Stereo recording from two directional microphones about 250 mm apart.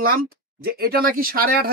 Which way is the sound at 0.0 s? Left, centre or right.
Right.